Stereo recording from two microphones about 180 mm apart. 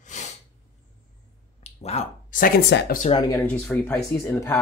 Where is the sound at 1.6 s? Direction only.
35° left (ahead or behind); by 3.1 s 55° left (ahead or behind).